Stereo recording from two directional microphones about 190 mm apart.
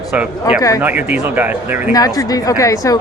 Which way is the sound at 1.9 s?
20° left (ahead or behind).